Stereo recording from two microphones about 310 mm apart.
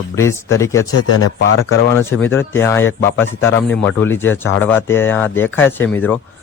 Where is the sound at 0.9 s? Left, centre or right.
Left.